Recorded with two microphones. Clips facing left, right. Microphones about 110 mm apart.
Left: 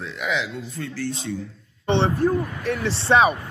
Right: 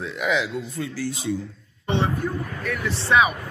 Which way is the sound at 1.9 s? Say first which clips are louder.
Left 5 dB; 30° left (ahead or behind).